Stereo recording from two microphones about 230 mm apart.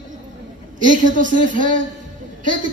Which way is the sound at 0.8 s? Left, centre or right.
Right.